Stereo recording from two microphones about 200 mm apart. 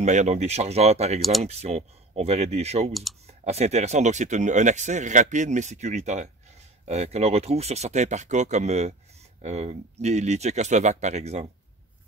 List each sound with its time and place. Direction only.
0.0 s speech: 35° right (ahead or behind)
2.9 s speech: centre (ahead or behind)
3.3 s speech: 30° right (ahead or behind)